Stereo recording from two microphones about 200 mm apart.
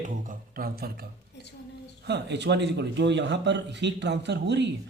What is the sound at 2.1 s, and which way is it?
A man's voice, 60° right (ahead or behind).